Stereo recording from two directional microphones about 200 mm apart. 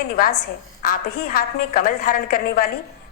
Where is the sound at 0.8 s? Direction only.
45° left (ahead or behind).